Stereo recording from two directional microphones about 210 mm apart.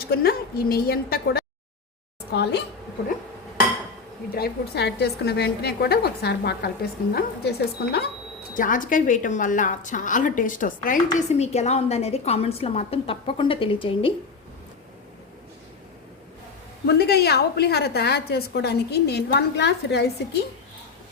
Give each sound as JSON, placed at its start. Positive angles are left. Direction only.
{"t": 0.0, "sound": "a woman's voice", "side_deg": 45}
{"t": 4.4, "sound": "a woman's voice", "side_deg": 50}
{"t": 8.5, "sound": "a woman's voice", "side_deg": 40}
{"t": 16.8, "sound": "a woman's voice", "side_deg": 50}